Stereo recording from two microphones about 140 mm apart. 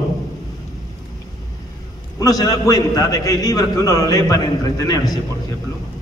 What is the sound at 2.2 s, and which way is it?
A man's voice, 25° left (ahead or behind).